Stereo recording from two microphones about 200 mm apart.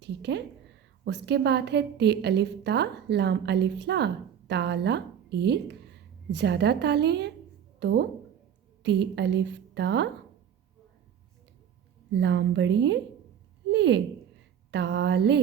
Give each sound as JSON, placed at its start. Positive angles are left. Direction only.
{"t": 0.0, "sound": "a woman's voice", "side_deg": -60}
{"t": 12.1, "sound": "a woman's voice", "side_deg": -60}